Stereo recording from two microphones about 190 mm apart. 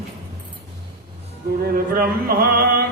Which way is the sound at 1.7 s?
50° right (ahead or behind).